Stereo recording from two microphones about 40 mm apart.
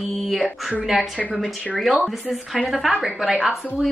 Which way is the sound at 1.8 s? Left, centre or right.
Centre.